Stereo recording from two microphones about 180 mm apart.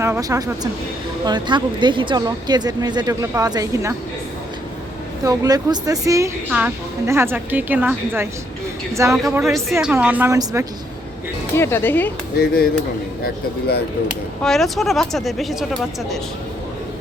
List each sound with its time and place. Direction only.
0.0 s speech: 15° right (ahead or behind)
5.2 s a woman's voice: 20° right (ahead or behind)
9.3 s a woman's voice: centre (ahead or behind)
11.5 s speech: 15° left (ahead or behind)
13.2 s speech: 65° left (ahead or behind)
14.4 s speech: centre (ahead or behind)